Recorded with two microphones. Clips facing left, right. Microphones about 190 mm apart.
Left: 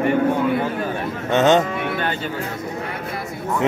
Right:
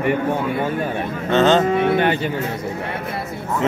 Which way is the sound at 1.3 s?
15° left (ahead or behind).